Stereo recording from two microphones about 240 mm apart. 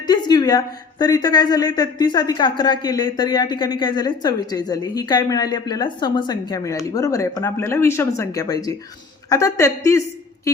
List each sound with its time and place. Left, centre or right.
0.1 s a woman's voice: centre